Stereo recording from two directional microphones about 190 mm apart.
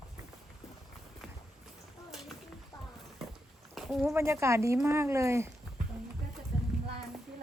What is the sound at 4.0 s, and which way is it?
A woman's voice, 15° right (ahead or behind).